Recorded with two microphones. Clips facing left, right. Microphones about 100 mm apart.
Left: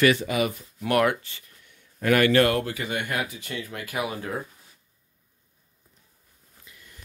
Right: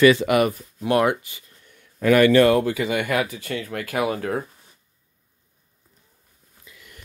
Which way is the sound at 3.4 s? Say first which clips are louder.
Right 6 dB; 45° right (ahead or behind).